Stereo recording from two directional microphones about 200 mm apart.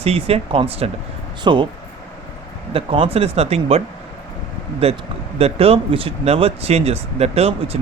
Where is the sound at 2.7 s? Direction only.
25° right (ahead or behind).